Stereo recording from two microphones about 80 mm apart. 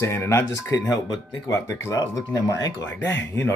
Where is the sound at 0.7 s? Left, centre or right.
Left.